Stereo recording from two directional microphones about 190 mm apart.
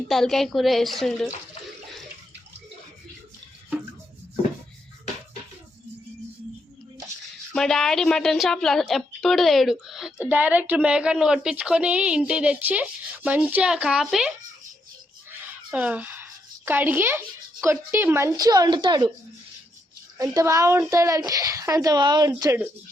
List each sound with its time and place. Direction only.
0.1 s a woman's voice: centre (ahead or behind)
7.5 s a woman's voice: 5° left (ahead or behind); by 19.1 s 25° right (ahead or behind)
20.1 s a woman's voice: 15° right (ahead or behind)